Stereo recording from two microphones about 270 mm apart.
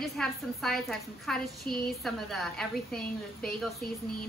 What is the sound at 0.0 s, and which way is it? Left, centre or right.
Speech, centre.